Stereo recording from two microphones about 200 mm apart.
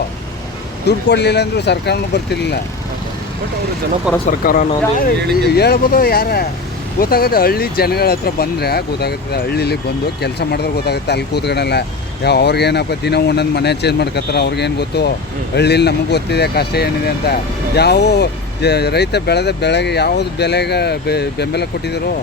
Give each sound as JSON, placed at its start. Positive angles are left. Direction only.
{"t": 0.9, "sound": "speech", "side_deg": 55}
{"t": 4.3, "sound": "speech", "side_deg": 45}